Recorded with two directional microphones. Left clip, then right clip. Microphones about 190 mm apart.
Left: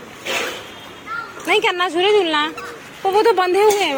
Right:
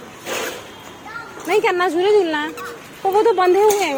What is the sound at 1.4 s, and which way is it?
Speech, centre (ahead or behind).